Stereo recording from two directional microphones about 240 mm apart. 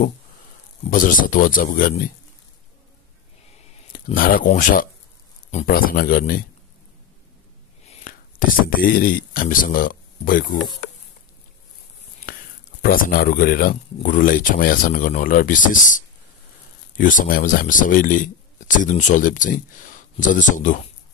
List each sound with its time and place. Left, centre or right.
0.8 s a man's voice: left
3.9 s a man's voice: left
8.0 s speech: left
12.8 s a man's voice: left